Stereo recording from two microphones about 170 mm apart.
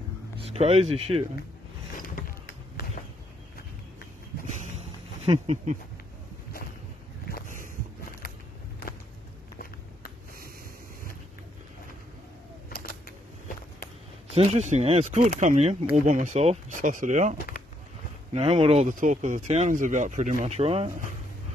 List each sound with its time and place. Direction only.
0.4 s speech: 35° right (ahead or behind)
2.0 s mechanisms: 55° left (ahead or behind)
5.2 s speech: 35° right (ahead or behind)
7.2 s boat: 60° left (ahead or behind)
12.7 s a sound: 65° left (ahead or behind)
14.3 s speech: 40° right (ahead or behind)
18.3 s speech: 35° right (ahead or behind)